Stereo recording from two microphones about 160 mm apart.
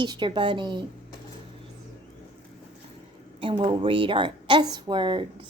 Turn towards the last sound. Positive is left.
turn(degrees=-30)  # may be behind; listen again after turning